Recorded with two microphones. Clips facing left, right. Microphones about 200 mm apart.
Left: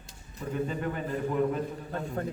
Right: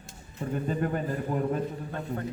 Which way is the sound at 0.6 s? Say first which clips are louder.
Right 4 dB; 45° right (ahead or behind).